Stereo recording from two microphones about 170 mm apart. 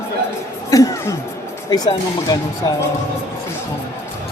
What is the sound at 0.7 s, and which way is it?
Speech, 20° left (ahead or behind).